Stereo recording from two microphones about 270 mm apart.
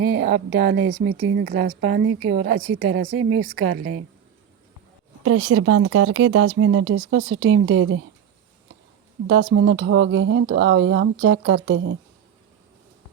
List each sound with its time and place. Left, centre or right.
0.0 s a woman's voice: right
5.2 s speech: right
9.2 s speech: right